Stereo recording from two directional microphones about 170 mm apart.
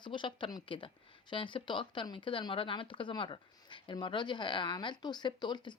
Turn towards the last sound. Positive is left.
turn(degrees=25)  # may be behind; listen again after turning